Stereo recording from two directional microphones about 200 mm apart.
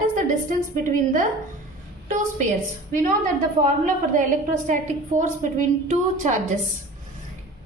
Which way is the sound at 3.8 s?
40° right (ahead or behind).